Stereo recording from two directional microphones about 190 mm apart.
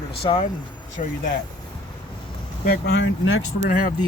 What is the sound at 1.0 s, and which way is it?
Speech, 40° left (ahead or behind).